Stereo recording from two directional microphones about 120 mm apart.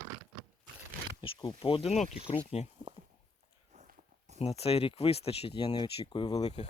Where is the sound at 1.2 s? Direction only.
45° left (ahead or behind).